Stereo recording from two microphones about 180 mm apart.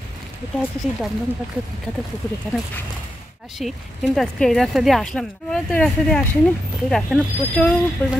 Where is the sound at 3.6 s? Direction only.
Centre (ahead or behind).